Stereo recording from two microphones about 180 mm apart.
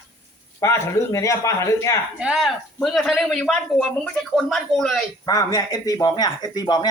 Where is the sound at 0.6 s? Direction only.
15° left (ahead or behind).